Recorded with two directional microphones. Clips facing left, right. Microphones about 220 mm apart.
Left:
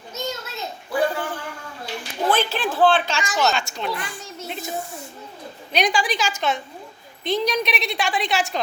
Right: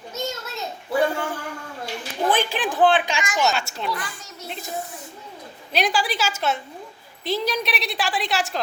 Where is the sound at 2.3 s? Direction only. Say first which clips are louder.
Left 1 dB; 15° right (ahead or behind).